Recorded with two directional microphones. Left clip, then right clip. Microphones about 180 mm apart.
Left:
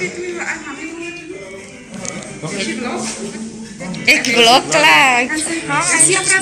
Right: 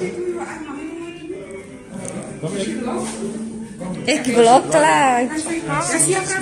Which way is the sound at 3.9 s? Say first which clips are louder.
Left 5 dB; 40° right (ahead or behind).